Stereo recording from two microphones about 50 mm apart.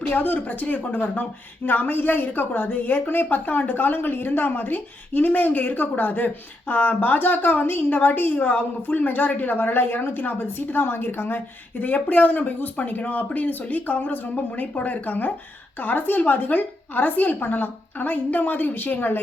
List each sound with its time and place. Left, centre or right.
0.1 s speech: left